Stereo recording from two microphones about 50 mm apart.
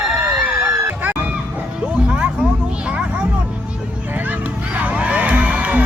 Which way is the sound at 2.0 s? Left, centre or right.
Right.